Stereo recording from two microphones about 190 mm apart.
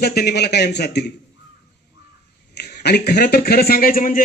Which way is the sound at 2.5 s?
60° left (ahead or behind).